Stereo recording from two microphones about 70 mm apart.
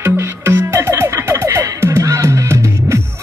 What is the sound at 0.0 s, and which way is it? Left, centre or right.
Music, right.